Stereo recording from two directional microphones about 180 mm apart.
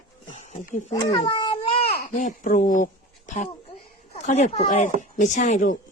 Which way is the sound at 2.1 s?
45° left (ahead or behind).